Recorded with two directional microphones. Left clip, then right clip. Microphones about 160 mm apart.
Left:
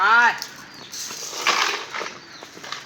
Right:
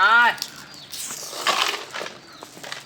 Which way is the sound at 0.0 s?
25° right (ahead or behind).